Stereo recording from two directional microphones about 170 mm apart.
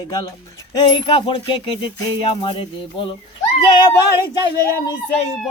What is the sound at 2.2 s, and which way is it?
Speech, 30° left (ahead or behind).